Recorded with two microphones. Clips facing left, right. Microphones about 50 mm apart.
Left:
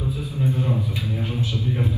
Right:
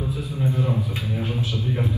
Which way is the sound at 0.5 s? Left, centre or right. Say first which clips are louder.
Even; right.